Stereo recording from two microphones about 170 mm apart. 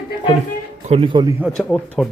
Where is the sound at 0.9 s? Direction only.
30° right (ahead or behind).